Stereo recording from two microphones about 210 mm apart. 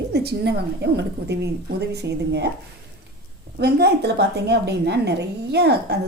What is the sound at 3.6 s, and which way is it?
A woman's voice, 50° right (ahead or behind).